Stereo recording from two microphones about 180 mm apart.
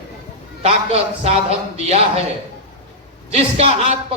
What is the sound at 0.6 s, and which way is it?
A man's voice, 35° right (ahead or behind).